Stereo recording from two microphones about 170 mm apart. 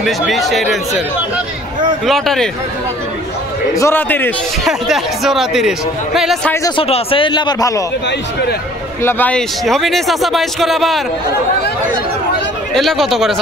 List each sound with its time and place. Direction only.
0.0 s a man's voice: centre (ahead or behind)
2.0 s a man's voice: centre (ahead or behind)
3.7 s a man's voice: 15° left (ahead or behind)
4.6 s a man's voice: centre (ahead or behind)
6.8 s a man's voice: 35° left (ahead or behind)
9.0 s a man's voice: 10° left (ahead or behind)
12.7 s a man's voice: centre (ahead or behind)